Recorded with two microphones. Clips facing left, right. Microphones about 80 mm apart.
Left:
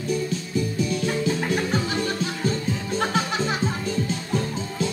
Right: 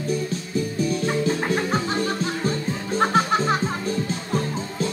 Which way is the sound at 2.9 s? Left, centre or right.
Right.